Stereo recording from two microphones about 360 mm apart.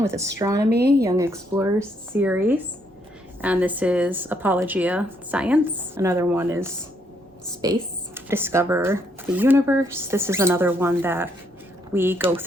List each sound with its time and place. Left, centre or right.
0.0 s speech: centre
0.7 s speech: right
1.0 s speech: centre